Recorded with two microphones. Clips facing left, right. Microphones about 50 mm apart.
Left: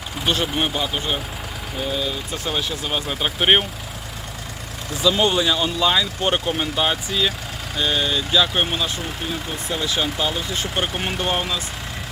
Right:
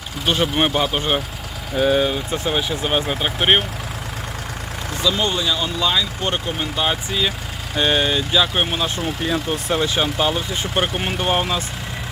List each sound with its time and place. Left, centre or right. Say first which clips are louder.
0.3 s speech: right 3 dB; centre
0.5 s speech: right 4 dB; right
1.7 s speech: right 9 dB; right
2.0 s speech: right 6 dB; right
2.5 s speech: right 4 dB; centre
5.0 s speech: left 2 dB; centre
6.9 s speech: even; centre
7.8 s speech: right 3 dB; right
8.3 s speech: right 1 dB; centre
9.2 s speech: right 8 dB; right
9.7 s speech: right 3 dB; right
10.9 s speech: right 3 dB; centre